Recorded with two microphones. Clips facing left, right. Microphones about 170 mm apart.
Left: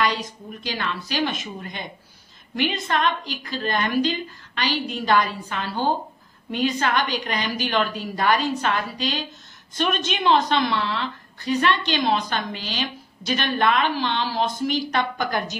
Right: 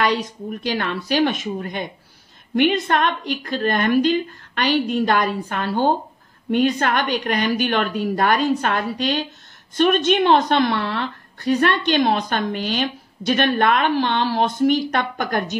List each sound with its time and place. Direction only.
0.7 s a woman's voice: 55° right (ahead or behind)